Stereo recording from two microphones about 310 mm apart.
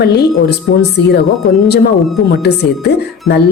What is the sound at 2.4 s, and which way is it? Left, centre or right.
A woman's voice, left.